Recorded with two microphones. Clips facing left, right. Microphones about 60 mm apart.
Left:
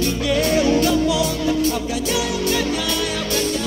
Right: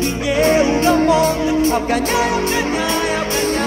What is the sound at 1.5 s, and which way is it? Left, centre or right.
Music, right.